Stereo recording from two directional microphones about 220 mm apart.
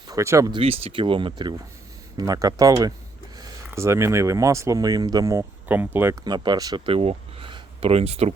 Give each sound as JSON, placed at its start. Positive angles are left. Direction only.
{"t": 0.1, "sound": "speech", "side_deg": -15}